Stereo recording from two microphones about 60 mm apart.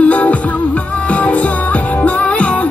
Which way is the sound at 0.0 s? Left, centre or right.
Left.